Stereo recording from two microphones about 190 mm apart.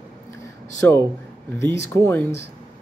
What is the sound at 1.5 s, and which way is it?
Speech, 65° right (ahead or behind).